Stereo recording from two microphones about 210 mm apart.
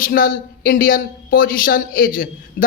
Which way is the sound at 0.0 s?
45° left (ahead or behind).